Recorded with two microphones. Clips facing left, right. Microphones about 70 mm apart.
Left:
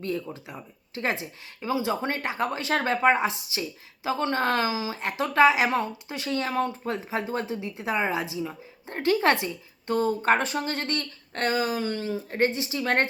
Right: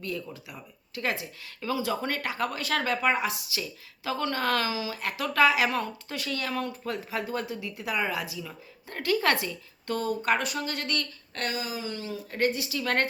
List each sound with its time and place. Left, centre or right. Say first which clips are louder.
0.0 s speech: left 4 dB; left